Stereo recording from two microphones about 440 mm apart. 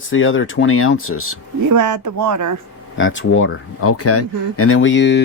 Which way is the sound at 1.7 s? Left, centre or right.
Right.